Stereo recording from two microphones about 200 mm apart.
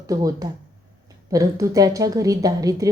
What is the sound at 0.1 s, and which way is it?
A woman's voice, 20° right (ahead or behind).